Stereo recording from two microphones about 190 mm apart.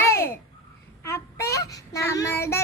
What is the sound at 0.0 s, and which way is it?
Babbling, 15° left (ahead or behind).